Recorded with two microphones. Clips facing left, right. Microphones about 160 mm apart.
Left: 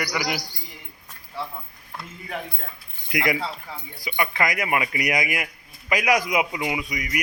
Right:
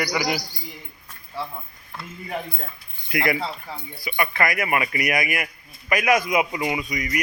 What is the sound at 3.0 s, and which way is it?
A man's voice, 15° left (ahead or behind).